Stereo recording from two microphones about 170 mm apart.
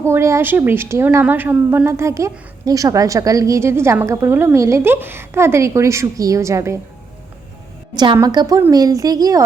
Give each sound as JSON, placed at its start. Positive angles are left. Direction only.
{"t": 0.0, "sound": "a woman's voice", "side_deg": -15}
{"t": 7.9, "sound": "a woman's voice", "side_deg": -25}